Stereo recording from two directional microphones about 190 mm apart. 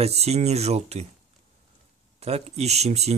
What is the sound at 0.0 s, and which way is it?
Speech, 35° right (ahead or behind).